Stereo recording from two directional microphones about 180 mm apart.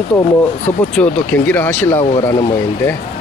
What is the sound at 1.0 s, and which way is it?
Speech, 10° left (ahead or behind).